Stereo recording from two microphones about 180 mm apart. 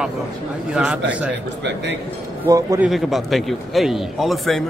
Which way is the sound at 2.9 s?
Centre (ahead or behind).